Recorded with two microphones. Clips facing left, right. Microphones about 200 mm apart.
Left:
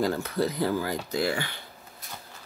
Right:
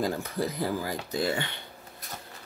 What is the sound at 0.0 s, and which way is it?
Speech, 15° right (ahead or behind).